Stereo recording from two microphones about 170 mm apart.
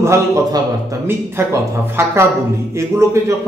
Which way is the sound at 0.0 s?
20° right (ahead or behind).